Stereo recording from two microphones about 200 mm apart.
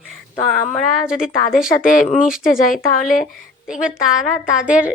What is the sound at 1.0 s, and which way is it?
Speech, 5° right (ahead or behind).